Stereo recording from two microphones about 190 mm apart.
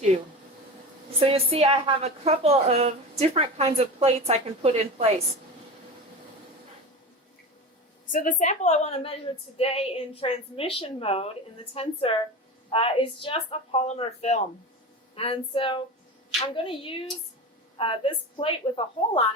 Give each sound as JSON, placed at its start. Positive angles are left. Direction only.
{"t": 1.2, "sound": "a woman's voice", "side_deg": -30}
{"t": 8.1, "sound": "a woman's voice", "side_deg": 45}